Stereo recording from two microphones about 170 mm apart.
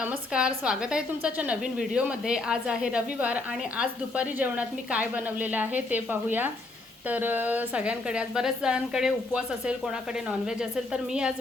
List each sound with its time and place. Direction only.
0.0 s a woman's voice: 5° right (ahead or behind)